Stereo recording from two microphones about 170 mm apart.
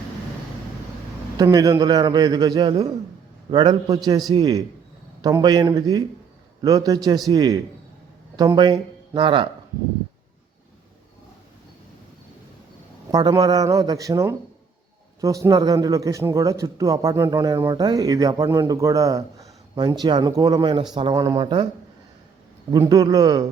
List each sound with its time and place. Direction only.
1.4 s a man's voice: 20° right (ahead or behind)
13.1 s a man's voice: 25° right (ahead or behind)
22.7 s a man's voice: 20° right (ahead or behind)